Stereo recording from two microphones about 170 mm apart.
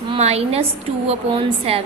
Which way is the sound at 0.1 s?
35° right (ahead or behind).